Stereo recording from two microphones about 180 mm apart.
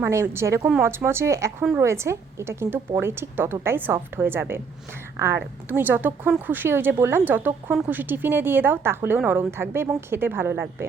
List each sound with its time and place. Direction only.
0.0 s a woman's voice: 15° right (ahead or behind)